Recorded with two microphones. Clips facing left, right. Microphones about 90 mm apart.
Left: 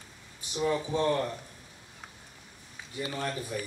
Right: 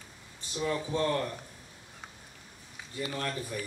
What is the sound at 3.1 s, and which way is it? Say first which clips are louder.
Speech: left 2 dB; 15° left (ahead or behind).